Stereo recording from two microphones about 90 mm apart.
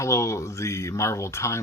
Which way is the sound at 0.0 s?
35° left (ahead or behind).